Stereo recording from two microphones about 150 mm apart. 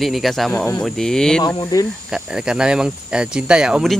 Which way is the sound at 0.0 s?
Centre (ahead or behind).